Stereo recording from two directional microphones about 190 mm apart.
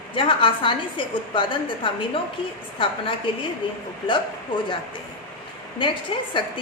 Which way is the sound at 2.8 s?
25° left (ahead or behind).